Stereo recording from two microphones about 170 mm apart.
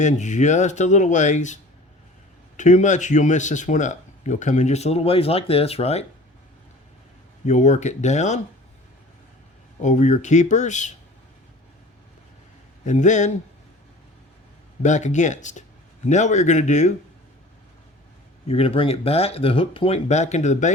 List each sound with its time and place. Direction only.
0.0 s speech: 45° left (ahead or behind)
2.6 s speech: 45° left (ahead or behind)
7.4 s speech: 45° left (ahead or behind)
9.8 s speech: 45° left (ahead or behind)
12.8 s speech: 45° left (ahead or behind)
14.8 s speech: 45° left (ahead or behind)
18.4 s speech: 35° left (ahead or behind)